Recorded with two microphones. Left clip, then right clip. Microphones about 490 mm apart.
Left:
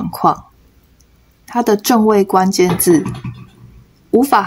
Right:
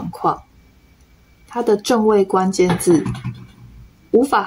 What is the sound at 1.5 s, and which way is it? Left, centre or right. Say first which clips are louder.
Speech: left 3 dB; left.